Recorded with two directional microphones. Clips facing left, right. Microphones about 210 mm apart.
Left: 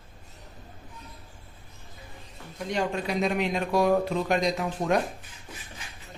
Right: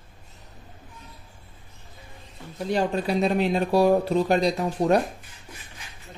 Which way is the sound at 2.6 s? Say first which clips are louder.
Right 4 dB; 35° right (ahead or behind).